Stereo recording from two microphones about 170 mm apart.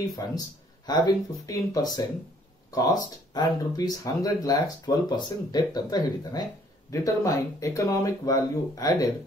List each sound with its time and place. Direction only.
0.2 s speech: 20° left (ahead or behind)